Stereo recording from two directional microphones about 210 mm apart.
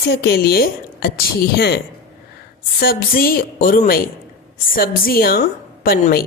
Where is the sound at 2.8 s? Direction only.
45° left (ahead or behind).